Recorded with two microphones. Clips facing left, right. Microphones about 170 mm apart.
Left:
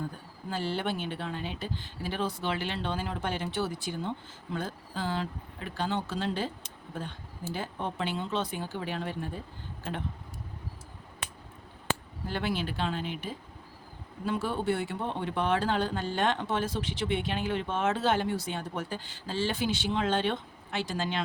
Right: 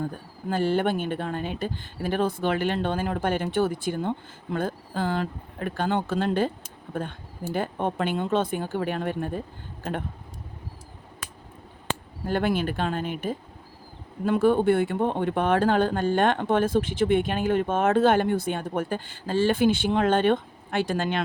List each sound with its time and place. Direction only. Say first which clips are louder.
0.5 s speech: right 8 dB; 50° right (ahead or behind)
12.2 s speech: right 10 dB; 50° right (ahead or behind)